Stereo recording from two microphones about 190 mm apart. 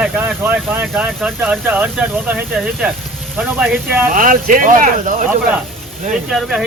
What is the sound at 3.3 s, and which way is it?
Speech, centre (ahead or behind).